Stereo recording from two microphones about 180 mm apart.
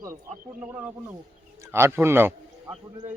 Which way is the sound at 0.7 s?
10° right (ahead or behind).